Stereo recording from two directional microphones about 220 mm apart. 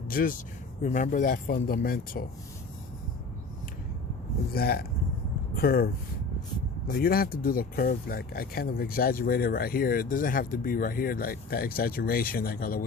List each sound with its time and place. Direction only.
0.1 s speech: 40° left (ahead or behind)
4.5 s speech: 45° left (ahead or behind)